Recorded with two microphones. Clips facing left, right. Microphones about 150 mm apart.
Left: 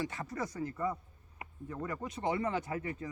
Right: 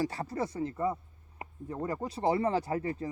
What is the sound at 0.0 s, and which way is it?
Speech, 35° right (ahead or behind).